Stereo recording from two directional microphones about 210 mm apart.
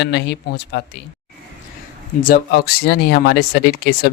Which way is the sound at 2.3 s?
50° left (ahead or behind).